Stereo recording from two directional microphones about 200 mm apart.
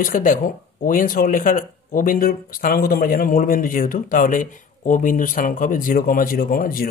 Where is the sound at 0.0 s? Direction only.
40° left (ahead or behind).